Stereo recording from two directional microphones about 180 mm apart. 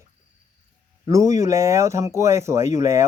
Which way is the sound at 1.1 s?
20° right (ahead or behind).